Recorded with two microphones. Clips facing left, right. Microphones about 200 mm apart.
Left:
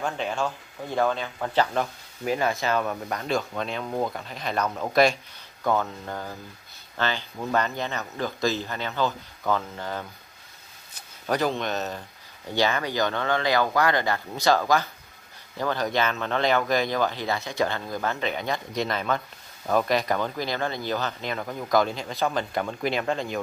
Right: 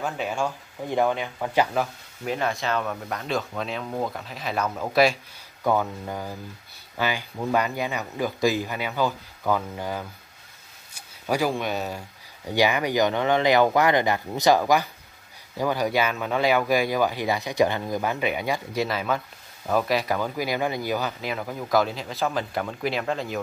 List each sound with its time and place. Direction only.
0.0 s speech: 10° right (ahead or behind)